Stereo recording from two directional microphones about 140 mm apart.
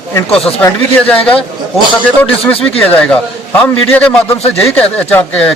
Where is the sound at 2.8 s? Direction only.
5° left (ahead or behind).